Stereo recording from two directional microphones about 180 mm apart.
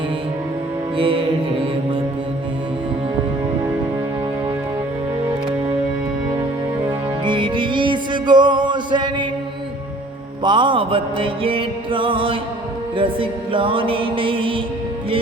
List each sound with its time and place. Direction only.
0.9 s music: 30° right (ahead or behind)
7.3 s music: 25° right (ahead or behind)
10.4 s music: 25° right (ahead or behind)